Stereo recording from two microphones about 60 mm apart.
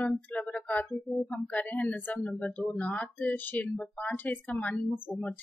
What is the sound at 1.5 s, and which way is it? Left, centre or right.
A woman's voice, left.